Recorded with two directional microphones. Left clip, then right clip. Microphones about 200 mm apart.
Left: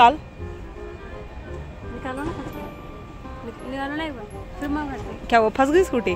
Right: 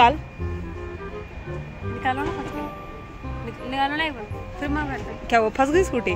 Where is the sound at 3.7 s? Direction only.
25° right (ahead or behind).